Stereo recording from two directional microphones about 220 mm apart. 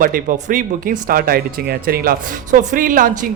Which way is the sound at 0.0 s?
40° right (ahead or behind).